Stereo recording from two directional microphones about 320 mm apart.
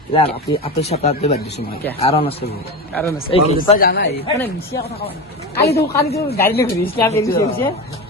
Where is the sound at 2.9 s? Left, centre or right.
Centre.